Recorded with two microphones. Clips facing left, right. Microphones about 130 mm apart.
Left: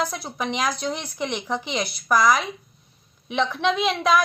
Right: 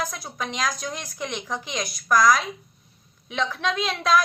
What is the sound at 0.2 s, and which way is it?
A woman's voice, 20° left (ahead or behind).